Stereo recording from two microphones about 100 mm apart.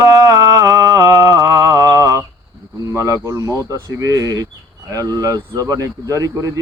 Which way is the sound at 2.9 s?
30° right (ahead or behind).